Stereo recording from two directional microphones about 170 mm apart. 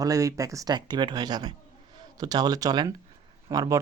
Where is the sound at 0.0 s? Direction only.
20° right (ahead or behind).